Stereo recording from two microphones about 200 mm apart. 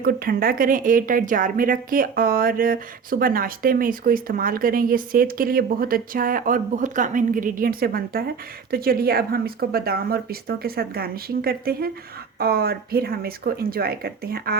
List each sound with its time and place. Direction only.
0.0 s speech: 50° right (ahead or behind)